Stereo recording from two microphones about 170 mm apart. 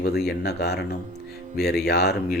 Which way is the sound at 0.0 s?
70° left (ahead or behind).